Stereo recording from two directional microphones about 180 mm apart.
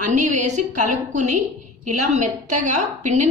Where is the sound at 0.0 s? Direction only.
40° right (ahead or behind).